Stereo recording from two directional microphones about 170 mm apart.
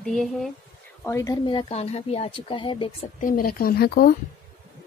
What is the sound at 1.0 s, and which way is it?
A woman's voice, 15° left (ahead or behind).